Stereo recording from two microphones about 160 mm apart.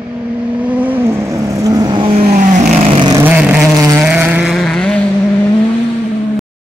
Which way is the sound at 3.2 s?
5° right (ahead or behind).